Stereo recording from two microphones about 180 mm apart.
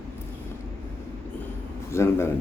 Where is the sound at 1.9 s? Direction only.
15° left (ahead or behind).